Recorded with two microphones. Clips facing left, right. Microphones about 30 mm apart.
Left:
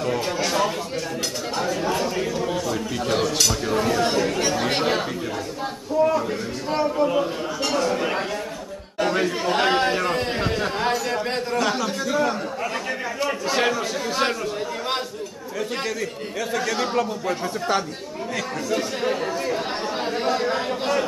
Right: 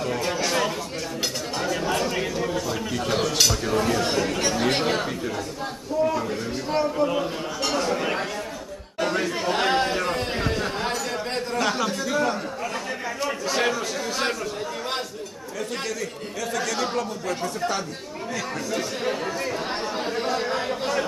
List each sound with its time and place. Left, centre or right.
0.0 s chatter: centre
3.1 s speech: centre
6.0 s a sound: centre
6.7 s speech: centre
16.5 s speech: centre
18.7 s speech: centre